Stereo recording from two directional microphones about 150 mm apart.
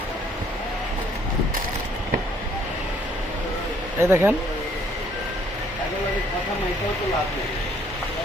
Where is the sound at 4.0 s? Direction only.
15° right (ahead or behind).